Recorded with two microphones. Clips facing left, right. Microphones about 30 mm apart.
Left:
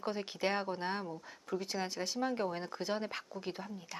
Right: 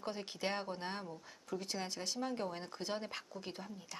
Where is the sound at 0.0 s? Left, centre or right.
Centre.